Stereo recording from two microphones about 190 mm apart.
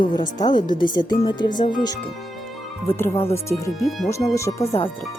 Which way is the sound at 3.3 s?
15° left (ahead or behind).